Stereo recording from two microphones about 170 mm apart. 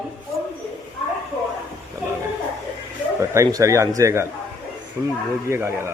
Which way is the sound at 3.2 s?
15° right (ahead or behind).